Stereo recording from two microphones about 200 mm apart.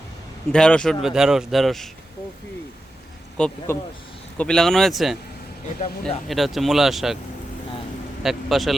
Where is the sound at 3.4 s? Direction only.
5° left (ahead or behind).